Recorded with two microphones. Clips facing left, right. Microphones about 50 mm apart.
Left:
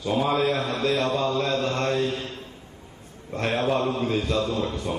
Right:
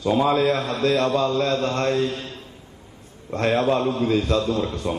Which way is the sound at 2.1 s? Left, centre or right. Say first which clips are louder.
Even; left.